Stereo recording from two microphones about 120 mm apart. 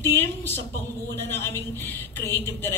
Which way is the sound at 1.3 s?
20° left (ahead or behind).